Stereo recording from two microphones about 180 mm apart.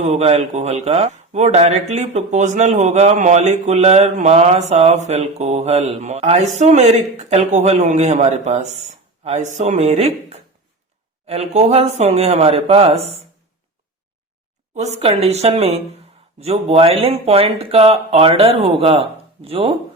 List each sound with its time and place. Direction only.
0.0 s speech: 35° right (ahead or behind)
14.8 s speech: 35° right (ahead or behind)